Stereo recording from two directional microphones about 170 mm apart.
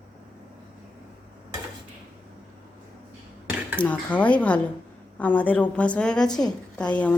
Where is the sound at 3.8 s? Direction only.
10° left (ahead or behind).